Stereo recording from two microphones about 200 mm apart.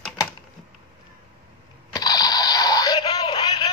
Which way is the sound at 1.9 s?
20° left (ahead or behind).